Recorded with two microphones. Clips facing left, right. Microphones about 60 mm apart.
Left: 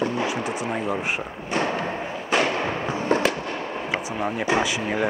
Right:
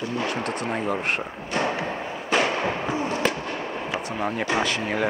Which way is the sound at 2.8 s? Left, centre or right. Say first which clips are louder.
Right 1 dB; centre.